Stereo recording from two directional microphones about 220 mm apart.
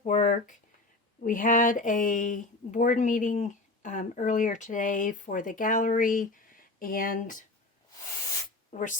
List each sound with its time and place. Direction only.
0.0 s a sound: 35° left (ahead or behind)
1.2 s speech: 35° left (ahead or behind)
8.7 s speech: 35° left (ahead or behind)